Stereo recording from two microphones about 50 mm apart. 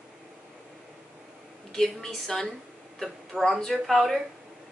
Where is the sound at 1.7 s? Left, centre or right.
Centre.